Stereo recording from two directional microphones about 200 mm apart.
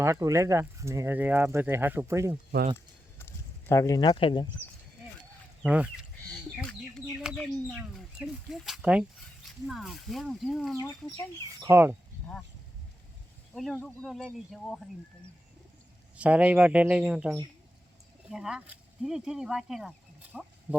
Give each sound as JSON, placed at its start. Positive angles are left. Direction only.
{"t": 0.0, "sound": "speech", "side_deg": -15}
{"t": 3.7, "sound": "speech", "side_deg": 15}
{"t": 5.6, "sound": "speech", "side_deg": -5}
{"t": 7.1, "sound": "speech", "side_deg": -5}
{"t": 11.5, "sound": "speech", "side_deg": -15}
{"t": 13.5, "sound": "speech", "side_deg": 5}
{"t": 16.1, "sound": "speech", "side_deg": -5}